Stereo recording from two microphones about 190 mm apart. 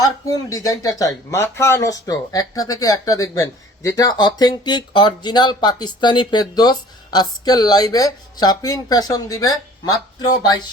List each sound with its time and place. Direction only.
0.5 s speech: 15° left (ahead or behind)